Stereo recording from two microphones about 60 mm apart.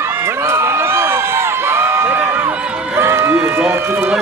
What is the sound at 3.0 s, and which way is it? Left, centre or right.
Run, right.